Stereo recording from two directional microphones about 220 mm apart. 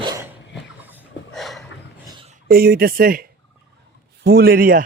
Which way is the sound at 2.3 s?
40° right (ahead or behind).